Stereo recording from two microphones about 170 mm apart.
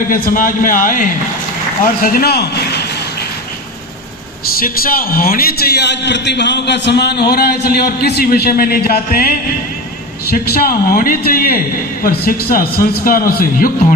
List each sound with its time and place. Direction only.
0.1 s a man's voice: 55° left (ahead or behind); by 2.6 s 70° left (ahead or behind)
4.6 s a man's voice: 55° left (ahead or behind)